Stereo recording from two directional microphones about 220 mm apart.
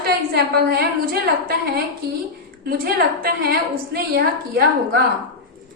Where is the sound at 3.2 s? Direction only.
45° right (ahead or behind).